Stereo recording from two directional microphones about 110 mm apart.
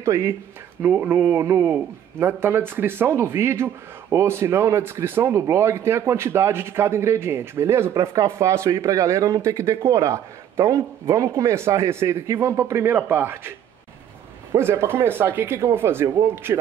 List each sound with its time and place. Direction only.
0.0 s a man's voice: 25° right (ahead or behind)